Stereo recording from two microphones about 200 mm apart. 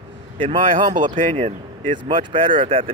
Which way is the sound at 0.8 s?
40° right (ahead or behind).